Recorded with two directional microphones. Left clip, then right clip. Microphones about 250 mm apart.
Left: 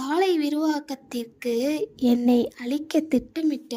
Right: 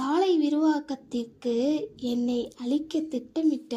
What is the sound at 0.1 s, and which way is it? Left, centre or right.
A woman's voice, left.